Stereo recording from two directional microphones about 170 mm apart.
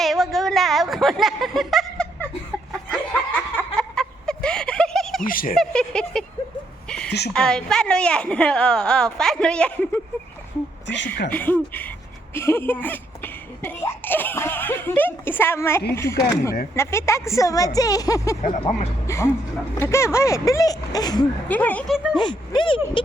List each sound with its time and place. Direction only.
0.0 s a sound: centre (ahead or behind)
5.2 s speech: 55° left (ahead or behind)
5.5 s a woman's voice: 5° left (ahead or behind)
7.3 s a woman's voice: 5° left (ahead or behind)
10.8 s speech: 90° left
11.3 s a woman's voice: 10° left (ahead or behind)
12.3 s a sound: 15° left (ahead or behind)
16.0 s a woman's voice: 15° left (ahead or behind)
21.4 s a woman's voice: 10° left (ahead or behind)
21.9 s a woman's voice: 5° right (ahead or behind)
22.2 s speech: 30° left (ahead or behind)